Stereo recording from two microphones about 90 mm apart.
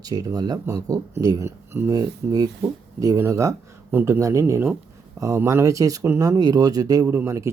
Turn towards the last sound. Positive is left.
turn(degrees=-30)  # may be behind; listen again after turning